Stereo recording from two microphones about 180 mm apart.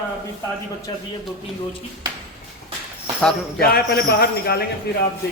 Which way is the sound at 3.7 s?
60° left (ahead or behind).